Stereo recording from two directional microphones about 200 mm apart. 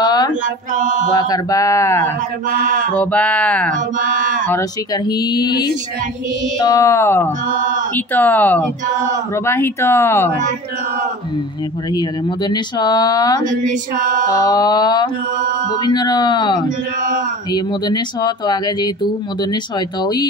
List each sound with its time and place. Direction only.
0.0 s mantra: 20° left (ahead or behind)
0.7 s female singing: 40° right (ahead or behind)
1.1 s speech: 20° left (ahead or behind)
2.5 s female singing: 40° right (ahead or behind)
3.0 s speech: 5° left (ahead or behind)
4.0 s female singing: 40° right (ahead or behind)
4.5 s speech: 15° left (ahead or behind)
11.9 s speech: 20° left (ahead or behind)
13.4 s female singing: 40° right (ahead or behind)
14.3 s speech: 15° left (ahead or behind)